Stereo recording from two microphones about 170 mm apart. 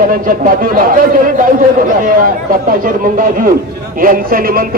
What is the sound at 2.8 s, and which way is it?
A man's voice, 55° right (ahead or behind).